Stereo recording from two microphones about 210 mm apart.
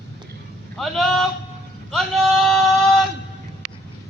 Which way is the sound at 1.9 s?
Centre (ahead or behind).